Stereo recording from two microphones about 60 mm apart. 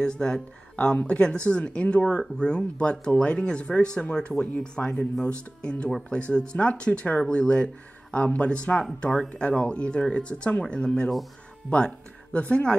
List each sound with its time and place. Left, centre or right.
0.0 s speech: centre